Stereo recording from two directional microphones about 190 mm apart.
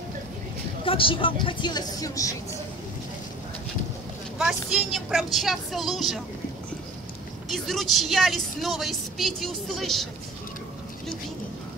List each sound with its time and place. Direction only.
0.8 s a woman's voice: 30° left (ahead or behind)
4.4 s a woman's voice: 5° right (ahead or behind)
7.5 s a woman's voice: centre (ahead or behind)